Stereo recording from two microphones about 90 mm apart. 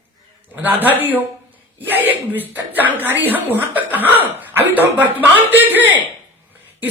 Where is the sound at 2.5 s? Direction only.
20° right (ahead or behind).